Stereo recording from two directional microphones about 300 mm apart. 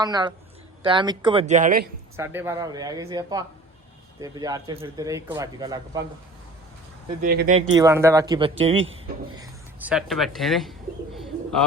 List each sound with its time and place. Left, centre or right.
0.0 s speech: centre
2.1 s speech: centre
7.2 s speech: right
7.8 s speech: centre